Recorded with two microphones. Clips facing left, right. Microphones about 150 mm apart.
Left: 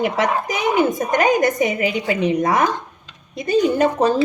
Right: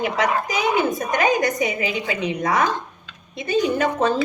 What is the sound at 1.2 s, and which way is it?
A woman's voice, 45° left (ahead or behind).